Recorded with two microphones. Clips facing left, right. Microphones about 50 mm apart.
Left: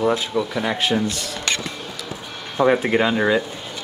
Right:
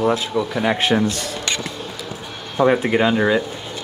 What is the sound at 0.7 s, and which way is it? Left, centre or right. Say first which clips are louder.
Speech: right 2 dB; right.